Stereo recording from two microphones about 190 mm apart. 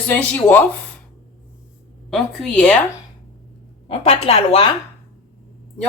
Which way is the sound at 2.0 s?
Centre (ahead or behind).